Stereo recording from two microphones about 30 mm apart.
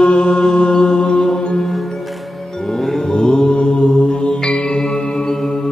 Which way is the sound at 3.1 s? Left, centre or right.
Left.